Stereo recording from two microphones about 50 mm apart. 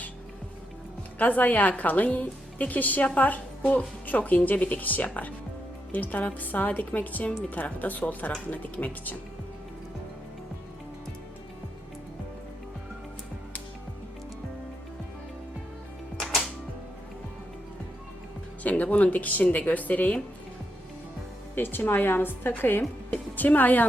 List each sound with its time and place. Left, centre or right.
1.2 s a woman's voice: left
16.2 s music: centre
18.6 s a woman's voice: left
21.5 s a woman's voice: left
23.1 s speech: left